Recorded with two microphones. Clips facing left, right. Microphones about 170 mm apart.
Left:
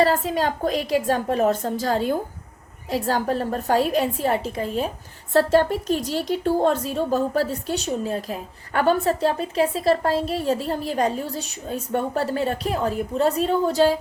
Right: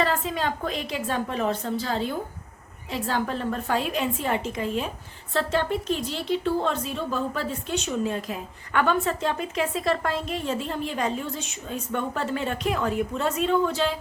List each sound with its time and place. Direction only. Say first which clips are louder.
0.0 s a woman's voice: left 5 dB; 40° left (ahead or behind)